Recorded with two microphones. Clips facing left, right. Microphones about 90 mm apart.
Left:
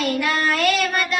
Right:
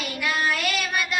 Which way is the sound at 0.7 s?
5° right (ahead or behind).